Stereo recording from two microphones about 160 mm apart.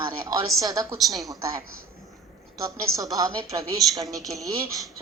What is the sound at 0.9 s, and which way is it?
Speech, centre (ahead or behind).